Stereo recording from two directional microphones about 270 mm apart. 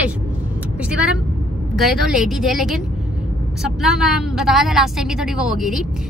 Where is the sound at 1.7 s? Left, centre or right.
Centre.